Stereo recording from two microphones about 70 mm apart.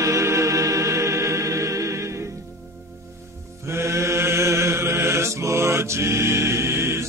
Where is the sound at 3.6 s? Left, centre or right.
Right.